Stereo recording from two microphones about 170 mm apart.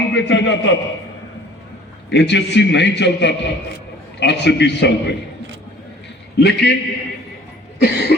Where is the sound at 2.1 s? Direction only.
90° left.